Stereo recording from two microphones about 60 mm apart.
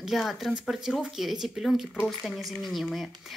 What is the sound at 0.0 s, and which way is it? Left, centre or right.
A woman's voice, centre.